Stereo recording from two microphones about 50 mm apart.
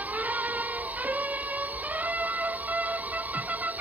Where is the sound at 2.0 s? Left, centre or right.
Right.